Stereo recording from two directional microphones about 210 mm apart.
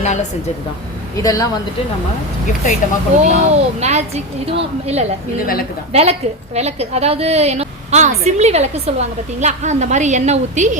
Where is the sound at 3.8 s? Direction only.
30° right (ahead or behind).